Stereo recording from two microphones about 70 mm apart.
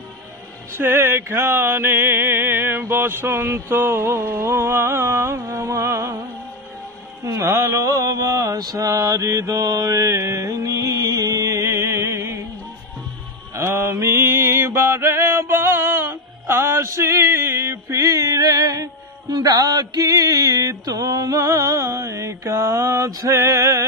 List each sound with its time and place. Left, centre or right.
0.7 s a sound: right
7.2 s mantra: right
13.6 s mantra: right